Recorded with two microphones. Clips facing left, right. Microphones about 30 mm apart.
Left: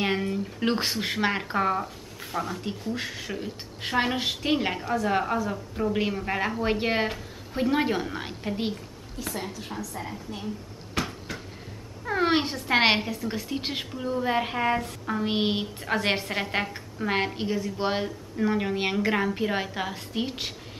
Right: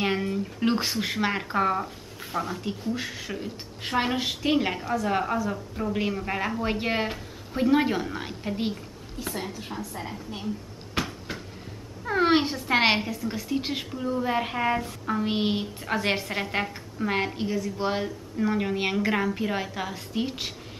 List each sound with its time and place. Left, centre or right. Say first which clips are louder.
0.0 s a woman's voice: even; centre
9.2 s a woman's voice: even; centre
11.0 s a sound: even; centre
12.1 s a woman's voice: right 2 dB; centre